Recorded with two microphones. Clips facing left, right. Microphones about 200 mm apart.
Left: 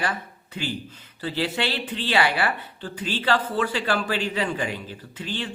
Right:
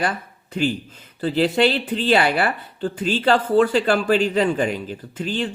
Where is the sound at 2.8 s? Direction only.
50° right (ahead or behind).